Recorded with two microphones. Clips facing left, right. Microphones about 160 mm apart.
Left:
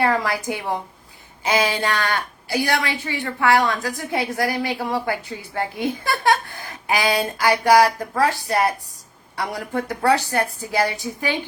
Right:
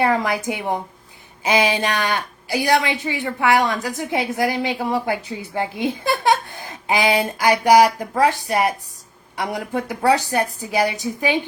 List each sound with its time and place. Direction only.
0.0 s a woman's voice: 20° right (ahead or behind)